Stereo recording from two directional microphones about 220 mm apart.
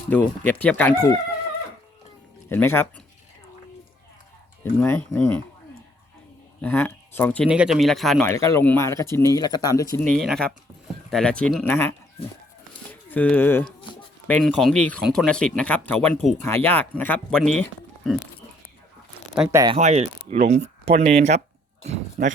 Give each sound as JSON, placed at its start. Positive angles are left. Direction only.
{"t": 0.1, "sound": "speech", "side_deg": 5}
{"t": 2.5, "sound": "speech", "side_deg": 10}
{"t": 4.8, "sound": "speech", "side_deg": 10}
{"t": 6.6, "sound": "speech", "side_deg": 10}
{"t": 7.4, "sound": "speech", "side_deg": -5}
{"t": 8.3, "sound": "speech", "side_deg": 15}
{"t": 10.0, "sound": "speech", "side_deg": 5}
{"t": 19.4, "sound": "speech", "side_deg": -15}
{"t": 19.7, "sound": "speech", "side_deg": -30}